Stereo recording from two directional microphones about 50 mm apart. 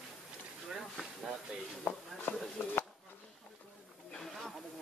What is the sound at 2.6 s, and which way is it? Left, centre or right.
Speech, left.